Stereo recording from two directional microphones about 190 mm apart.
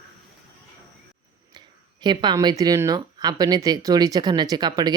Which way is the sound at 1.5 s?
25° right (ahead or behind).